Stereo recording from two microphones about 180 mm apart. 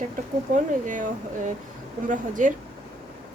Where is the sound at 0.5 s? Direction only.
45° right (ahead or behind).